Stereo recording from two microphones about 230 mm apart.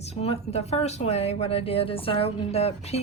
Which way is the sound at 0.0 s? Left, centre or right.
Left.